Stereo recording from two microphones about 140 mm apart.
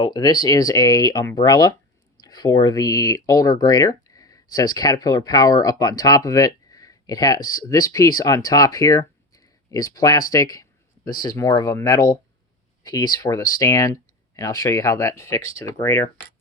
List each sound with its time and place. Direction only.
0.0 s speech: 30° left (ahead or behind)